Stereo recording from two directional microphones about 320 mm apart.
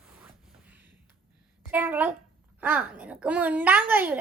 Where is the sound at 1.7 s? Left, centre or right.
Centre.